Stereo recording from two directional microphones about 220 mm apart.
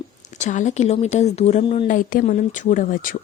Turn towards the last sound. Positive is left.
turn(degrees=40)  # may be behind; listen again after turning